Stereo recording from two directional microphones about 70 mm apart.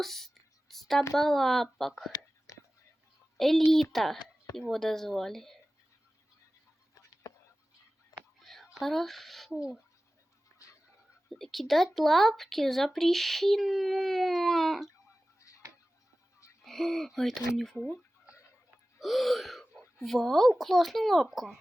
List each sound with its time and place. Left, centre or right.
0.0 s speech: centre
0.7 s a sound: centre
1.1 s speech: centre
2.5 s whispering: left
3.3 s a woman's voice: centre
8.4 s whispering: centre
11.3 s speech: centre
15.4 s a sound: left
16.6 s speech: centre
17.7 s speech: left
18.9 s gasp: centre
20.0 s speech: centre